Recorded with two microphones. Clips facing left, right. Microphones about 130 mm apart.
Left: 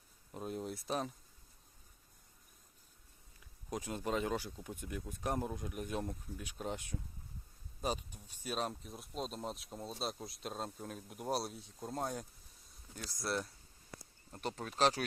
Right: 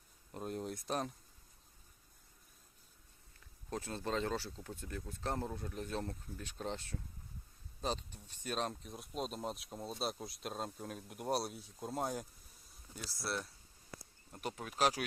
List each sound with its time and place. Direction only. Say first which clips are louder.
0.3 s speech: even; centre (ahead or behind)
3.7 s speech: left 1 dB; 15° left (ahead or behind); by 15.0 s 10° right (ahead or behind)